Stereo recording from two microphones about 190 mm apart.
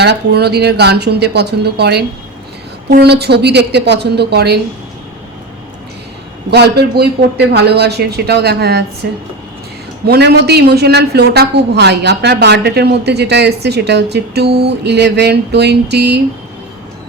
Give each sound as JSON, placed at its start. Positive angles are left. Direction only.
{"t": 0.0, "sound": "a woman's voice", "side_deg": -60}
{"t": 6.5, "sound": "a woman's voice", "side_deg": -60}